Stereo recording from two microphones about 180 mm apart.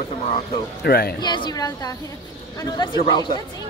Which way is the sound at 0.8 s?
60° left (ahead or behind).